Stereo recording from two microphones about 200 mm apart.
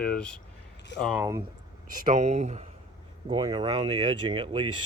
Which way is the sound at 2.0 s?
35° right (ahead or behind).